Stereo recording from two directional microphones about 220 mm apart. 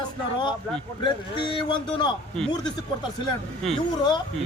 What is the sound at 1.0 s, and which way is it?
Speech, 20° left (ahead or behind).